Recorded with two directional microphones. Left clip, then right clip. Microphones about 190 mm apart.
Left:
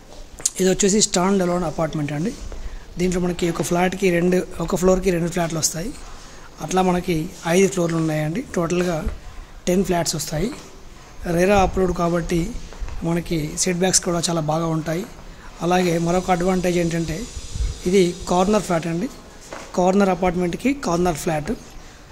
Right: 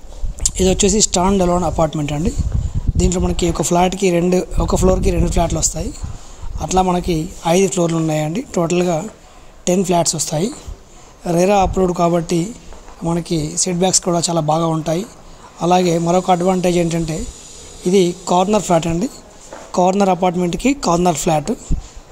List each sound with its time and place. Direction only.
0.4 s speech: 15° right (ahead or behind)